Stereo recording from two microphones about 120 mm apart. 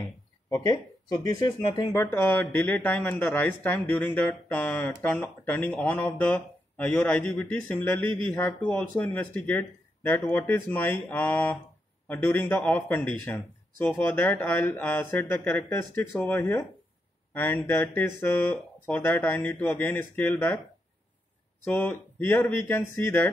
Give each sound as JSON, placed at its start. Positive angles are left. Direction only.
{"t": 1.0, "sound": "speech", "side_deg": 35}
{"t": 21.6, "sound": "speech", "side_deg": 20}